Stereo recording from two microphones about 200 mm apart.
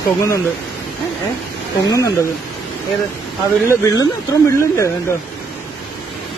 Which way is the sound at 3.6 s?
15° left (ahead or behind).